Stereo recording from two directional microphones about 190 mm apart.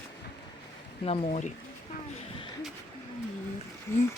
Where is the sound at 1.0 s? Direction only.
35° left (ahead or behind).